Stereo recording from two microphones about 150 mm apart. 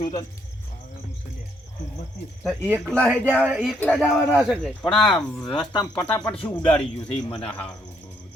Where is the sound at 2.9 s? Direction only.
5° left (ahead or behind).